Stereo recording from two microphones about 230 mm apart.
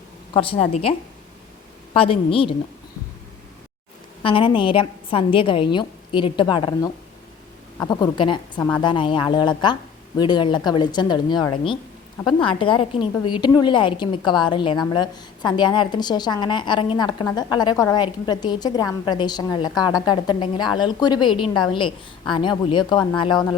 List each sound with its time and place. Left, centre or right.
0.3 s a woman's voice: left
4.2 s a woman's voice: left